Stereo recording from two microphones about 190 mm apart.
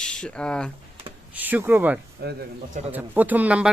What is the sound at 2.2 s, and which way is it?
Speech, 55° right (ahead or behind).